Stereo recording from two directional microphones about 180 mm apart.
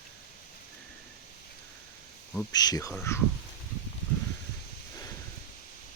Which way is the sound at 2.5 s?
20° left (ahead or behind).